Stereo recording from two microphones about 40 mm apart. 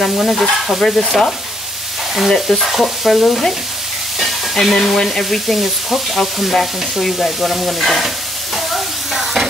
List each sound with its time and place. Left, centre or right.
0.2 s frying: centre
3.3 s frying: centre
9.1 s stir: centre